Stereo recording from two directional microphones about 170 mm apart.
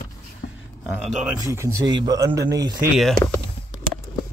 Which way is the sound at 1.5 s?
20° right (ahead or behind).